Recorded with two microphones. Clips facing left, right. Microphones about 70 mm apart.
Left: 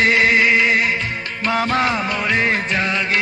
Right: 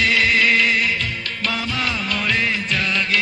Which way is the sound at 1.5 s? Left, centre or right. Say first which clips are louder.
Left 10 dB; left.